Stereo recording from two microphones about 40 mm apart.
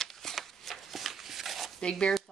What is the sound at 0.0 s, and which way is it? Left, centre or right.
Shuffling cards, centre.